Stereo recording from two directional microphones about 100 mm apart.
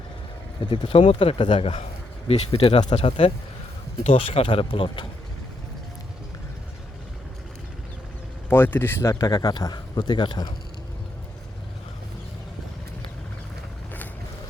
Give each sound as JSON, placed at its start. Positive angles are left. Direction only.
{"t": 0.6, "sound": "speech", "side_deg": 55}
{"t": 1.8, "sound": "speech", "side_deg": 85}
{"t": 8.4, "sound": "speech", "side_deg": 20}